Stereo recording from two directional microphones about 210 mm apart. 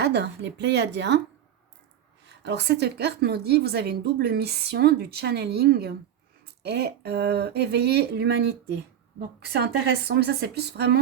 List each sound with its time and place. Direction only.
0.0 s a woman's voice: 55° right (ahead or behind)
2.2 s speech: 55° right (ahead or behind)